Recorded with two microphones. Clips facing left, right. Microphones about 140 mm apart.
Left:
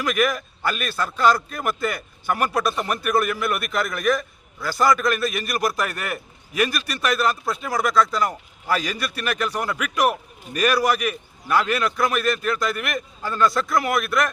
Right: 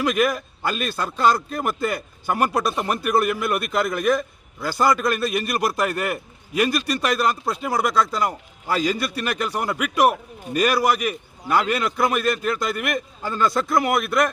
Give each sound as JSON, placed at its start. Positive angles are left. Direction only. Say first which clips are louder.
{"t": 0.2, "sound": "a man's voice", "louder": "right 1 dB", "side_deg": -25}